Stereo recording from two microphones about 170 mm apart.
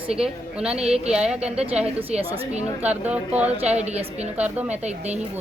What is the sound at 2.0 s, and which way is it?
Speech, 35° right (ahead or behind).